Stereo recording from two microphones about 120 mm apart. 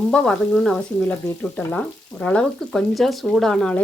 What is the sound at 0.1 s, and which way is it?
Speech, 10° left (ahead or behind).